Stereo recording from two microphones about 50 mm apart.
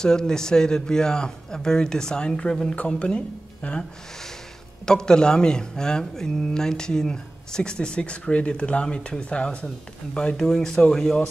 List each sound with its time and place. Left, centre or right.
0.0 s speech: centre
4.8 s speech: centre